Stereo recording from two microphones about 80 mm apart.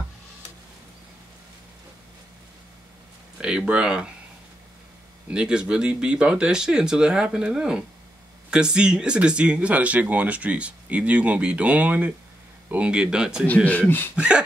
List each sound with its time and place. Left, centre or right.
3.3 s speech: centre
5.3 s speech: centre
13.7 s speech: left
14.1 s speech: centre